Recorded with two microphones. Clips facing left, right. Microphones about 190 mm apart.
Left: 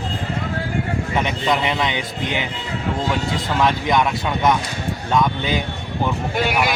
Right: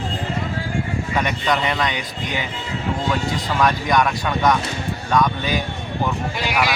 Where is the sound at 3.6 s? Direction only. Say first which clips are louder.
Even; 20° left (ahead or behind).